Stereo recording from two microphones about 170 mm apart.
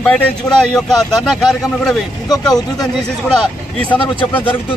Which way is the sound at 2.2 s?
25° left (ahead or behind).